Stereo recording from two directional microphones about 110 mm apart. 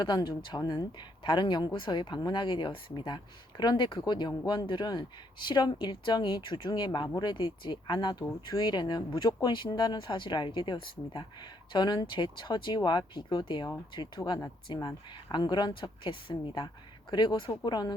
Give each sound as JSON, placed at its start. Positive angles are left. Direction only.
{"t": 0.0, "sound": "speech", "side_deg": 40}
{"t": 14.7, "sound": "speech", "side_deg": 45}